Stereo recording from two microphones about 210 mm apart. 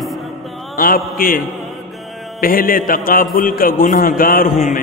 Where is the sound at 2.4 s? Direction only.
45° left (ahead or behind).